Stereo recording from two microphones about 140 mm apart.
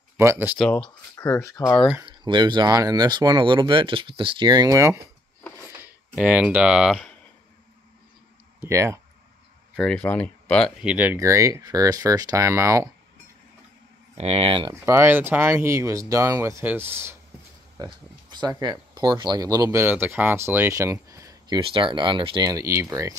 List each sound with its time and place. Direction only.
0.2 s speech: 15° right (ahead or behind)
0.6 s speech: 5° left (ahead or behind)
1.1 s speech: 20° left (ahead or behind)
2.0 s speech: 35° right (ahead or behind)
6.1 s speech: 10° right (ahead or behind)
8.5 s speech: 20° right (ahead or behind)
9.8 s speech: 5° left (ahead or behind)
10.8 s speech: 10° right (ahead or behind)
14.1 s speech: 45° right (ahead or behind)
14.7 s speech: 20° right (ahead or behind)
18.3 s speech: 30° right (ahead or behind)
19.8 s speech: 15° right (ahead or behind)
21.5 s speech: 40° right (ahead or behind)
22.5 s speech: 20° right (ahead or behind)